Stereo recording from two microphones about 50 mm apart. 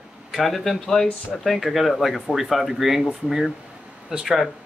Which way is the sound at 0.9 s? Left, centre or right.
Centre.